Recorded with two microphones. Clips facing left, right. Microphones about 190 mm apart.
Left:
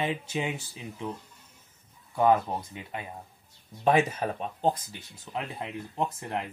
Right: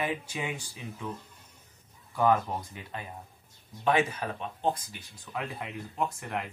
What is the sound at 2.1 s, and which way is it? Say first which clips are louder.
Speech: left 2 dB; 20° left (ahead or behind).